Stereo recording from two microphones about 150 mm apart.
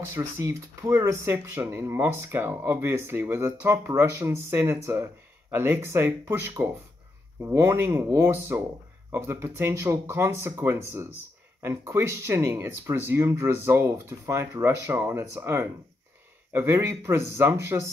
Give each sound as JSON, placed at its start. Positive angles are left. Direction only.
{"t": 0.1, "sound": "speech", "side_deg": -15}